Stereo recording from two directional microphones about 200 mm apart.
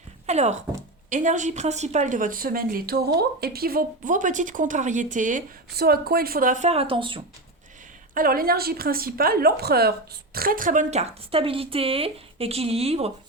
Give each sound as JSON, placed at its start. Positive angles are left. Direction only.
{"t": 0.3, "sound": "speech", "side_deg": -35}
{"t": 8.1, "sound": "a woman's voice", "side_deg": -45}